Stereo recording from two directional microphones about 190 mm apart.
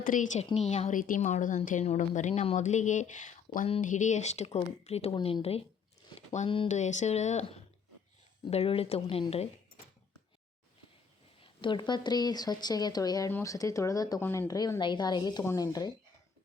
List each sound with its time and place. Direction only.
0.0 s speech: 45° left (ahead or behind)
11.3 s a woman's voice: 25° left (ahead or behind)